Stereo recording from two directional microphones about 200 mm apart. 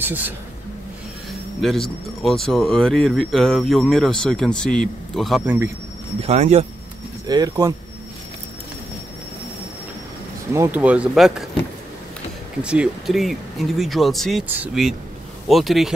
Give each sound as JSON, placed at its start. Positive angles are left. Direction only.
{"t": 0.0, "sound": "speech", "side_deg": -10}
{"t": 1.6, "sound": "speech", "side_deg": 0}
{"t": 6.2, "sound": "speech", "side_deg": -35}
{"t": 7.2, "sound": "speech", "side_deg": -20}
{"t": 10.5, "sound": "speech", "side_deg": -10}
{"t": 12.6, "sound": "speech", "side_deg": -5}